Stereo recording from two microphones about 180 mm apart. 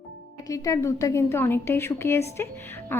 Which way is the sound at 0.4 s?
20° left (ahead or behind).